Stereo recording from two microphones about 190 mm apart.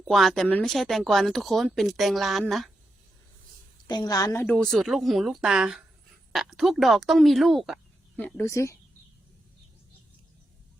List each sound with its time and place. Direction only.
0.0 s speech: centre (ahead or behind)
3.8 s a woman's voice: 20° left (ahead or behind)
4.4 s speech: 5° left (ahead or behind)
8.4 s speech: 15° left (ahead or behind)